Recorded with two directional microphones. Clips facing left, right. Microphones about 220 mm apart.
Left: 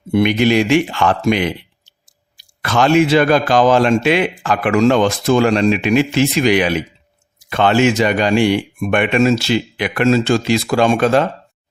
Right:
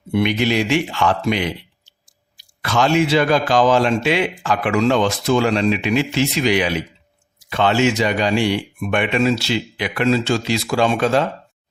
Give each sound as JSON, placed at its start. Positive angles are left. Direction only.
{"t": 0.1, "sound": "a man's voice", "side_deg": 50}
{"t": 2.6, "sound": "a man's voice", "side_deg": 55}